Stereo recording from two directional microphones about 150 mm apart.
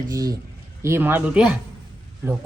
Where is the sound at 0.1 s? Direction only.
25° right (ahead or behind); by 1.5 s 5° right (ahead or behind).